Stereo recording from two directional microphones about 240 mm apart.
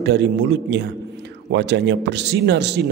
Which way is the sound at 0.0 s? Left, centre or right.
Right.